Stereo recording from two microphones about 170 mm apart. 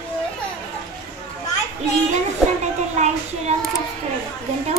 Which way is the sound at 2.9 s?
40° right (ahead or behind).